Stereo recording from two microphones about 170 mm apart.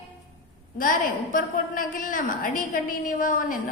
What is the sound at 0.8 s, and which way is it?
A woman's voice, 55° left (ahead or behind).